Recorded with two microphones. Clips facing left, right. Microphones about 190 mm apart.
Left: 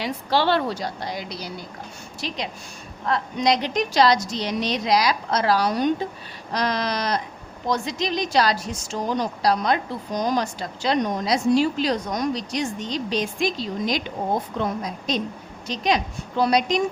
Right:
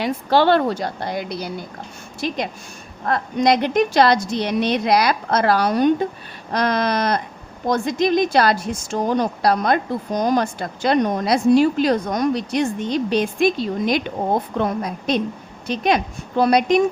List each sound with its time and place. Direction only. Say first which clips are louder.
0.0 s a woman's voice: right 5 dB; 50° right (ahead or behind)